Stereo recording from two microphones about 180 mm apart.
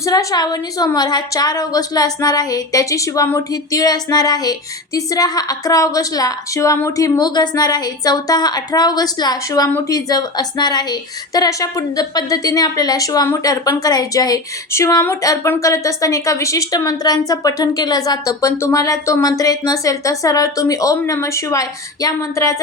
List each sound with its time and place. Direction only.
0.0 s a woman's voice: 20° left (ahead or behind)